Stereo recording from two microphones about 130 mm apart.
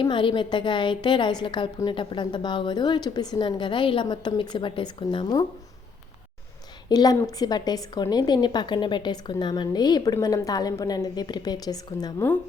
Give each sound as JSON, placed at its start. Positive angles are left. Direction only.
{"t": 0.0, "sound": "a woman's voice", "side_deg": 40}
{"t": 6.8, "sound": "a woman's voice", "side_deg": 30}